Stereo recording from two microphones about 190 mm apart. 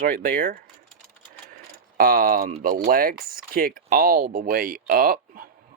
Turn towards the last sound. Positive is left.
turn(degrees=-50)  # may be behind; listen again after turning